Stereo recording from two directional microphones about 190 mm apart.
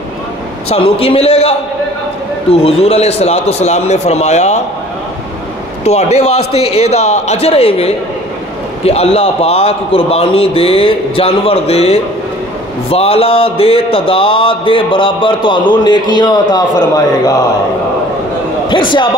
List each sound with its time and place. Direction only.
0.7 s a man's voice: 30° left (ahead or behind)
5.9 s a man's voice: 35° left (ahead or behind)
12.9 s a sound: 30° left (ahead or behind)